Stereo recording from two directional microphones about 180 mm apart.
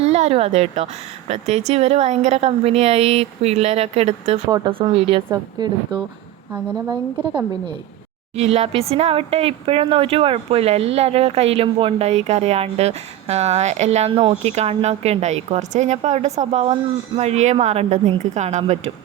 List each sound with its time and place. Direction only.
0.0 s a woman's voice: 35° right (ahead or behind)
4.4 s speech: 25° right (ahead or behind)
6.5 s speech: 10° right (ahead or behind)
8.4 s speech: 35° right (ahead or behind)